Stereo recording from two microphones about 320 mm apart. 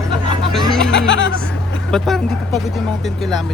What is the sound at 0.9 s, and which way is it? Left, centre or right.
Speech, left.